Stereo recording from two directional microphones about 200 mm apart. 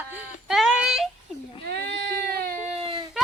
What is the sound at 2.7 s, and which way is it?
Baby cry, 25° right (ahead or behind).